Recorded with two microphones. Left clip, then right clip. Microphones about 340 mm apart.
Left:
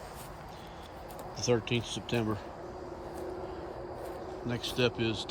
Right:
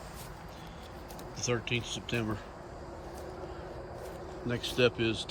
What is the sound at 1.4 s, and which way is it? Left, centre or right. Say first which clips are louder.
Speech: left 3 dB; centre.